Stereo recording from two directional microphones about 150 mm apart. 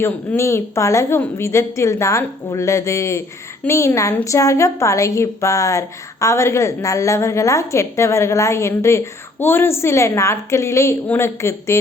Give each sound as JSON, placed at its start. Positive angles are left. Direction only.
{"t": 0.0, "sound": "a woman's voice", "side_deg": 15}